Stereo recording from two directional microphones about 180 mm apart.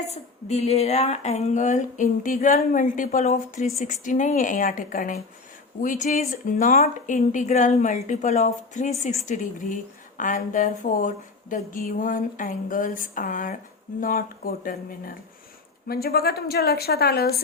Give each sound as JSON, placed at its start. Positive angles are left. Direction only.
{"t": 0.1, "sound": "a woman's voice", "side_deg": 35}